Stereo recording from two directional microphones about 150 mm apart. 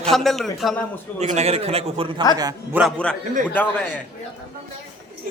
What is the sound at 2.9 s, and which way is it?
A man's voice, 5° left (ahead or behind).